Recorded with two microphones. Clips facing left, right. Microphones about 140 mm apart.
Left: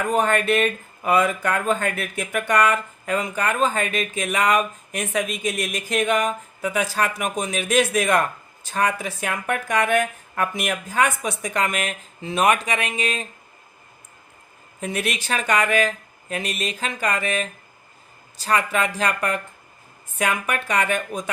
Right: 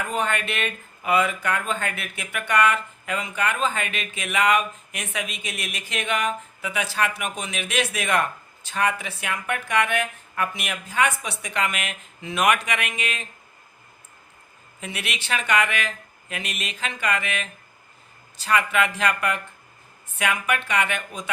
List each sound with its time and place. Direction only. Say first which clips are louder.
0.0 s speech: left 6 dB; 45° left (ahead or behind)
14.8 s speech: left 7 dB; 45° left (ahead or behind)